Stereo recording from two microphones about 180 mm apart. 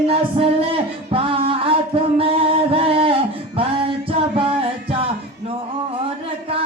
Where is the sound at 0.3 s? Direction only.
30° right (ahead or behind).